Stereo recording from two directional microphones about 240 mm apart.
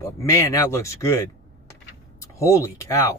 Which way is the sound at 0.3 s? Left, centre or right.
Centre.